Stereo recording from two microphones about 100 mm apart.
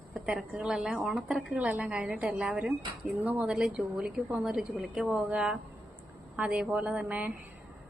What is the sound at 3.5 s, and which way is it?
A woman's voice, 5° right (ahead or behind).